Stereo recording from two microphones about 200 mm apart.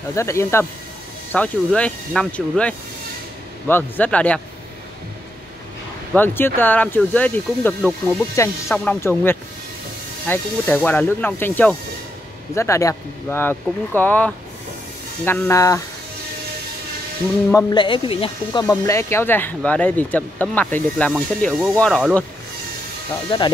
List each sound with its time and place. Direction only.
0.1 s speech: 15° left (ahead or behind)
6.1 s speech: 10° left (ahead or behind)
17.5 s speech: 20° left (ahead or behind)
18.7 s speech: 15° left (ahead or behind)
23.3 s speech: 25° left (ahead or behind)